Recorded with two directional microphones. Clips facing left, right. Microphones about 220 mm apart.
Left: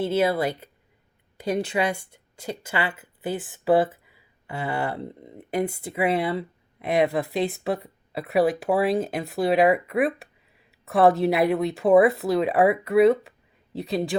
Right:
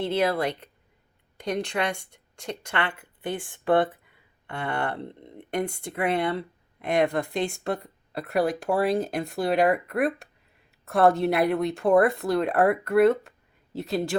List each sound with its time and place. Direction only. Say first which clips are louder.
0.0 s speech: left 2 dB; 5° left (ahead or behind)